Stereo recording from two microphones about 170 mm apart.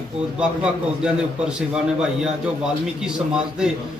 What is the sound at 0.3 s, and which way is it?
Speech, 5° right (ahead or behind).